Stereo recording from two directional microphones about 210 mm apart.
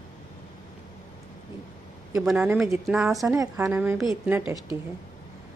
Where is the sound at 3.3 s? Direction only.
15° right (ahead or behind).